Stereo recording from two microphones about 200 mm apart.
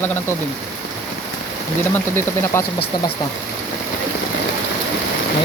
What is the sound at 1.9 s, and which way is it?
Speech, 10° left (ahead or behind).